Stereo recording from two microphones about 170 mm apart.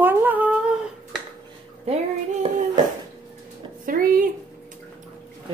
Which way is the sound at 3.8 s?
55° right (ahead or behind).